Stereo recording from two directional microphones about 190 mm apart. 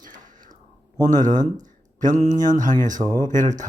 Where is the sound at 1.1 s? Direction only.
40° right (ahead or behind).